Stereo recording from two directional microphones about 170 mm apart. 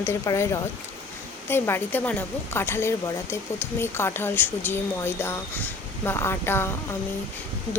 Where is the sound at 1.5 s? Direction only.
15° left (ahead or behind).